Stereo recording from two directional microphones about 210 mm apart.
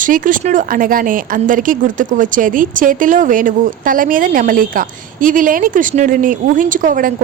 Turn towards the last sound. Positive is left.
turn(degrees=-40)  # may be behind; listen again after turning